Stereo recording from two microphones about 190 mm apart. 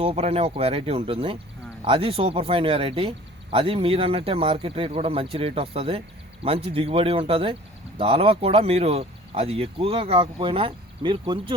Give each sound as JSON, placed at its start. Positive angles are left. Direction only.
{"t": 0.0, "sound": "speech", "side_deg": -30}